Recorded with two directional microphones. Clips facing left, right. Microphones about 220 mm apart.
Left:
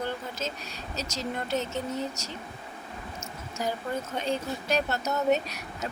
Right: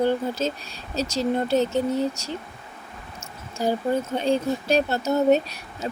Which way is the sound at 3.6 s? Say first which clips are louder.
Right 8 dB; 30° right (ahead or behind).